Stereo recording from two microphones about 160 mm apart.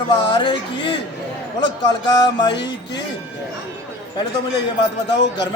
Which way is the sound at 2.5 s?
90° left.